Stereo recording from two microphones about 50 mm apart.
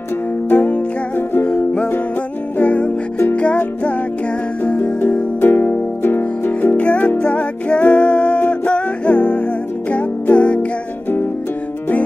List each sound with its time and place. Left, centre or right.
0.5 s music: left
1.5 s music: left
5.4 s music: left
6.8 s music: left